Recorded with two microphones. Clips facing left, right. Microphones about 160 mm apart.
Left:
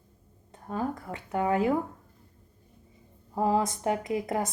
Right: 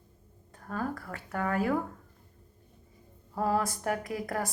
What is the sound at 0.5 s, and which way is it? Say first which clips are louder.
A woman's voice: left 3 dB; 20° left (ahead or behind).